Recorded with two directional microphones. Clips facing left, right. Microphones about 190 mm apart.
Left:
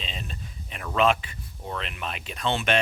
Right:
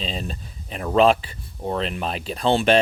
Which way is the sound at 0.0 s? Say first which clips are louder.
Right 8 dB; 35° right (ahead or behind).